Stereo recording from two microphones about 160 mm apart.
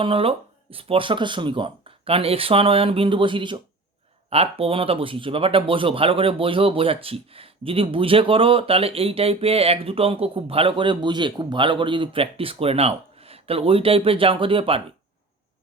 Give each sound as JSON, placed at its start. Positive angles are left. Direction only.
{"t": 0.0, "sound": "speech", "side_deg": -35}